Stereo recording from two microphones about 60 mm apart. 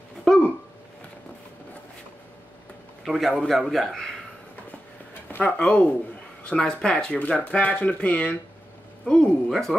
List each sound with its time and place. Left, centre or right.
0.3 s a sound: centre
3.1 s a man's voice: centre
5.3 s speech: left
9.5 s a man's voice: centre